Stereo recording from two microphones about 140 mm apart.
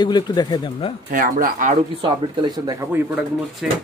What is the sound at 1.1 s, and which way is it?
Speech, 75° right (ahead or behind).